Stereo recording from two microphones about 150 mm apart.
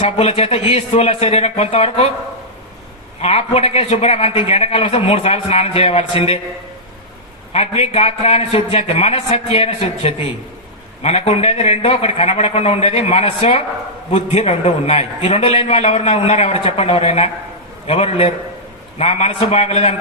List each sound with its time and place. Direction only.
0.0 s speech: 40° left (ahead or behind)
3.2 s a man's voice: 45° left (ahead or behind)
7.5 s a man's voice: 45° left (ahead or behind)